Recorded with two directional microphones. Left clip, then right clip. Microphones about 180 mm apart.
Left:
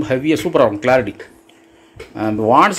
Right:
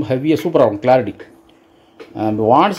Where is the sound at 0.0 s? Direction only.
25° right (ahead or behind).